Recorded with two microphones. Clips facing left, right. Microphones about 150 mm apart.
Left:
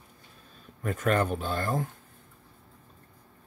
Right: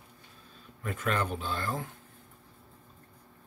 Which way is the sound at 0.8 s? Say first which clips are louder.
Left 5 dB; 45° left (ahead or behind).